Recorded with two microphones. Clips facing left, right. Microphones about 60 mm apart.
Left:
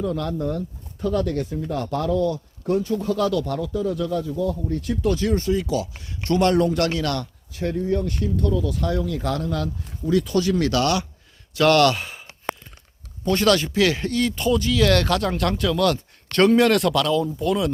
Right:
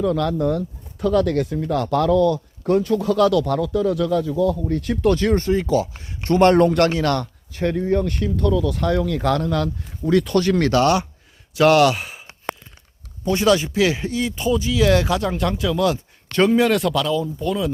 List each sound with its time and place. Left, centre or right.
0.1 s speech: right
4.8 s speech: right
6.4 s speech: right
6.9 s speech: right
10.7 s a man's voice: right
11.5 s speech: centre
13.2 s speech: centre